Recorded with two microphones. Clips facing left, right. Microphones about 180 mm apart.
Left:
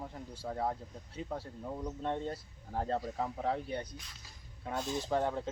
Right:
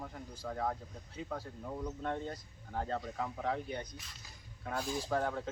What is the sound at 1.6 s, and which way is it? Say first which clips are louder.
Speech: left 2 dB; 15° left (ahead or behind).